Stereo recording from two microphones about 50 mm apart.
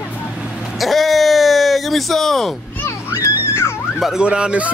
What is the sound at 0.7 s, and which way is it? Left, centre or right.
Speech, centre.